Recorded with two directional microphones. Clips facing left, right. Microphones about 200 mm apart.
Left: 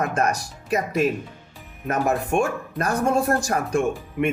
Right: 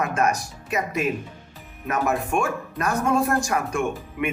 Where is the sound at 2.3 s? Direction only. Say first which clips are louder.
Left 2 dB; 35° left (ahead or behind).